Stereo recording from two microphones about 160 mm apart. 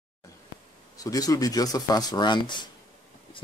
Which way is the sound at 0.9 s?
20° left (ahead or behind).